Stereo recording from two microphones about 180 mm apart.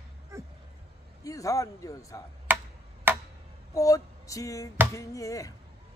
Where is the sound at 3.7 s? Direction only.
20° left (ahead or behind).